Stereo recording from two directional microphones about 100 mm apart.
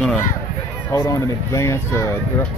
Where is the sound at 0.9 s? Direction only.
30° left (ahead or behind).